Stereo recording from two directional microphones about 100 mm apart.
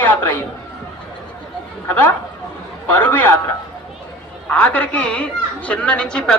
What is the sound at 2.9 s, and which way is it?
Speech, 15° left (ahead or behind).